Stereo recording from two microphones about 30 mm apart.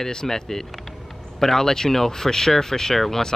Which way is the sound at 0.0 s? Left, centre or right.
Centre.